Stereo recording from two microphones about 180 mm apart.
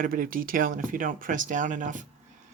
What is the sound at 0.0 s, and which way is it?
Speech, 50° right (ahead or behind).